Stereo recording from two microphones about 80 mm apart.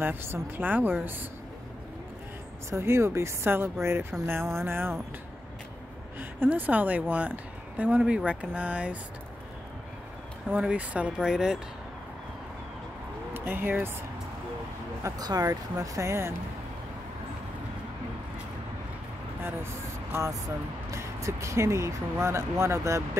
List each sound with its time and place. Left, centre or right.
0.0 s speech: right
2.7 s speech: right
6.1 s a woman's voice: right
10.5 s speech: centre
13.3 s speech: right
15.0 s speech: right
19.4 s speech: right